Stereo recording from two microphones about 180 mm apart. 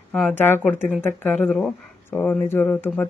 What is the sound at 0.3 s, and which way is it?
Speech, 10° left (ahead or behind).